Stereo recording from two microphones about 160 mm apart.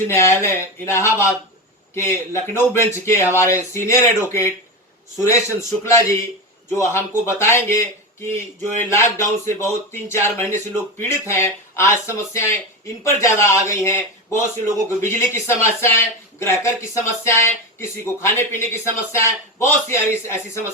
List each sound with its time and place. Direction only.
0.1 s speech: 15° left (ahead or behind)